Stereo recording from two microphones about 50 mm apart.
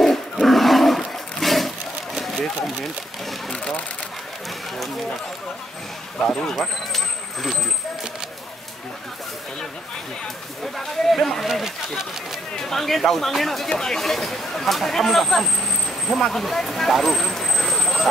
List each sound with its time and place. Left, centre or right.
0.0 s wild animals: centre
2.1 s a sound: centre
2.6 s speech: centre
3.5 s speech: left
6.2 s speech: centre
10.6 s speech: centre
11.4 s speech: centre
12.5 s speech: centre